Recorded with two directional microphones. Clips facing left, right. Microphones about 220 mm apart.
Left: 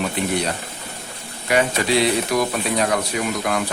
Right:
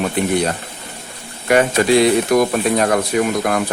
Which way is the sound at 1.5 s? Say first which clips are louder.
Right 6 dB; 50° right (ahead or behind).